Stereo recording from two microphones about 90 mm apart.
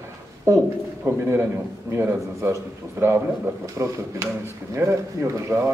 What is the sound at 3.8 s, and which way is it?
A man's voice, 25° right (ahead or behind).